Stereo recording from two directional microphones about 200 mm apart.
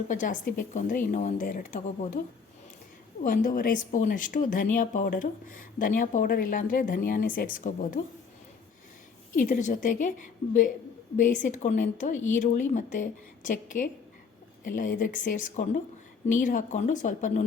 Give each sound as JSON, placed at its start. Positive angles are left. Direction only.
{"t": 0.1, "sound": "speech", "side_deg": 40}
{"t": 3.2, "sound": "speech", "side_deg": 45}
{"t": 9.3, "sound": "speech", "side_deg": 40}